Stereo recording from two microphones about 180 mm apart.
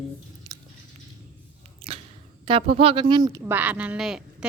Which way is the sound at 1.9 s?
35° right (ahead or behind).